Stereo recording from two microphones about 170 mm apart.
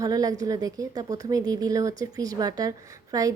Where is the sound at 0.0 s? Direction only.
20° right (ahead or behind).